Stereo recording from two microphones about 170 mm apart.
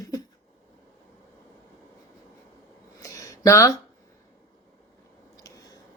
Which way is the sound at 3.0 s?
20° left (ahead or behind).